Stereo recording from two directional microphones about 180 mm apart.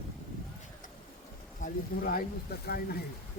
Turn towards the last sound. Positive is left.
turn(degrees=60)  # may be behind; listen again after turning